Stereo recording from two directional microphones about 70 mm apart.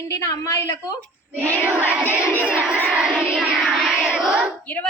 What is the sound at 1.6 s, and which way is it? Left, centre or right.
Speech, right.